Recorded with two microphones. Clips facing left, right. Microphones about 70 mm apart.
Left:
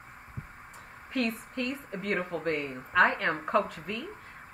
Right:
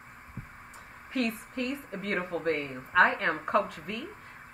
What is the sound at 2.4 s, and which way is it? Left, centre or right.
Speech, right.